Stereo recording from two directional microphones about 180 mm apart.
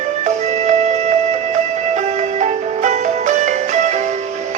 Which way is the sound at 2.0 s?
40° right (ahead or behind).